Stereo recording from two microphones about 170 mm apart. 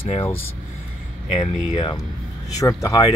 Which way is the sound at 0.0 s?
30° left (ahead or behind).